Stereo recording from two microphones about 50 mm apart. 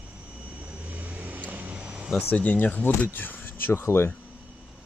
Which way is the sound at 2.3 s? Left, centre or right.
Left.